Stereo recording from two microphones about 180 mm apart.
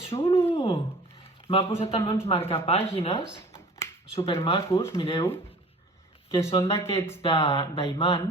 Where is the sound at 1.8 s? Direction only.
30° left (ahead or behind).